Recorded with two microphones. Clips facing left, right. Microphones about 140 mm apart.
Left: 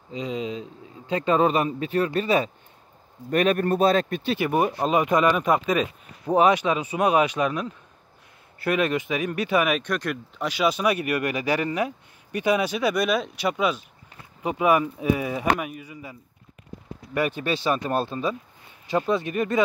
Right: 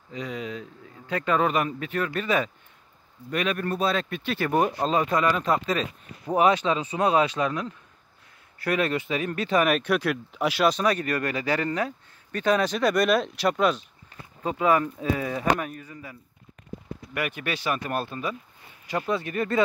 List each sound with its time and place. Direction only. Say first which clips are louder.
0.1 s speech: left 4 dB; 20° left (ahead or behind)
3.3 s speech: left 6 dB; 45° left (ahead or behind)
4.4 s speech: even; 10° left (ahead or behind)
14.4 s speech: left 2 dB; 15° left (ahead or behind)
17.1 s speech: left 5 dB; 30° left (ahead or behind)